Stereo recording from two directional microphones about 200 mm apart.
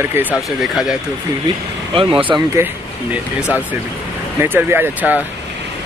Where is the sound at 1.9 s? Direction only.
25° right (ahead or behind).